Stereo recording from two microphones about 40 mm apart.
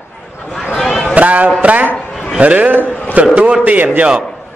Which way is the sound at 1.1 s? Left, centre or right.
Right.